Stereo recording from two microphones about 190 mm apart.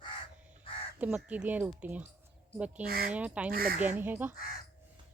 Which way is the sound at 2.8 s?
50° right (ahead or behind).